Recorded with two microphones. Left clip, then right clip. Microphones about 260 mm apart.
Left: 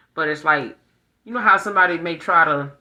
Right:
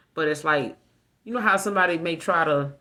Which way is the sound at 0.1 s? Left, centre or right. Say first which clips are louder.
Left 4 dB; right.